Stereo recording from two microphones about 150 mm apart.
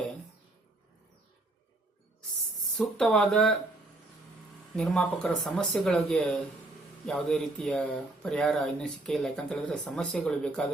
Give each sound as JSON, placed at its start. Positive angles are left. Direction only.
{"t": 2.7, "sound": "speech", "side_deg": 5}
{"t": 4.8, "sound": "speech", "side_deg": 5}